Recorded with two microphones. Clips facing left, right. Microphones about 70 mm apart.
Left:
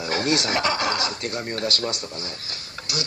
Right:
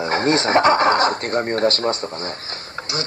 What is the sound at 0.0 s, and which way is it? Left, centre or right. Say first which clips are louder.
A man's voice: right 5 dB; right.